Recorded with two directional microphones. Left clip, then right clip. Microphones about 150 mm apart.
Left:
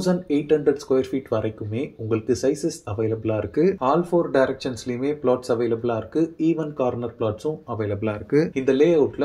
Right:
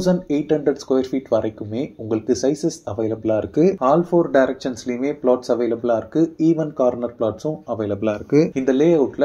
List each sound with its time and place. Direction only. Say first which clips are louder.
0.0 s speech: right 3 dB; 30° right (ahead or behind)